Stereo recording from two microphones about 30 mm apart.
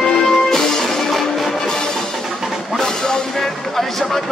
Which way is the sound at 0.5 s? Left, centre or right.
Centre.